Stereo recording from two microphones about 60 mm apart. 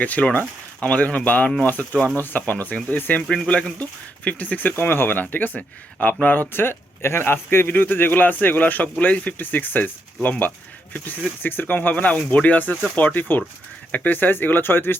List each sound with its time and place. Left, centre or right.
0.0 s speech: left
3.2 s speech: centre; by 9.9 s left
10.9 s speech: left
11.4 s speech: left